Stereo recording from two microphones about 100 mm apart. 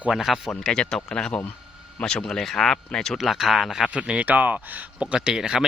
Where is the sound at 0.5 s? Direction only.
10° left (ahead or behind).